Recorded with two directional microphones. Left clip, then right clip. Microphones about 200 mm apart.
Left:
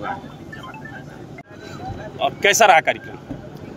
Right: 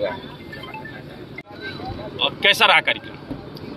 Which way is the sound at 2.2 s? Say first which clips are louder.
Left 1 dB; 55° left (ahead or behind).